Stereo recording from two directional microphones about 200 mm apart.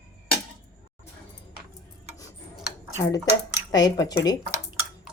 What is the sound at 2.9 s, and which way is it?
Speech, 15° left (ahead or behind).